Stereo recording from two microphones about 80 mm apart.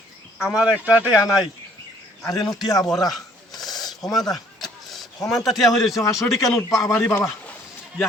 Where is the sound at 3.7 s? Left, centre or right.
Left.